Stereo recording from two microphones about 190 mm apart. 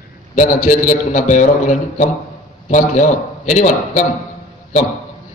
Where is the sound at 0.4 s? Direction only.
45° left (ahead or behind).